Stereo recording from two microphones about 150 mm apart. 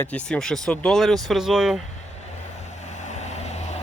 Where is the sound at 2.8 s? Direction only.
50° left (ahead or behind).